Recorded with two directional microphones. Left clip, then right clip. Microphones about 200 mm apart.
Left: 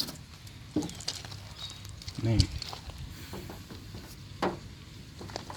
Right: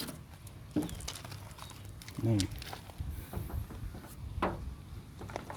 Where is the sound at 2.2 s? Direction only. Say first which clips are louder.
Left 3 dB; 10° right (ahead or behind).